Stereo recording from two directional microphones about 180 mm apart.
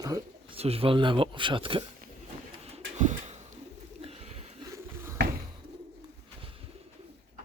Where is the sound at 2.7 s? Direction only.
40° right (ahead or behind).